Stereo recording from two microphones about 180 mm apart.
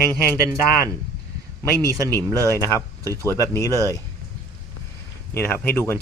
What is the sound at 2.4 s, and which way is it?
Speech, 15° left (ahead or behind).